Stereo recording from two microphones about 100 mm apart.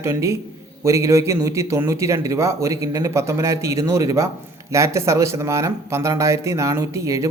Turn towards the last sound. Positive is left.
turn(degrees=-30)  # may be behind; listen again after turning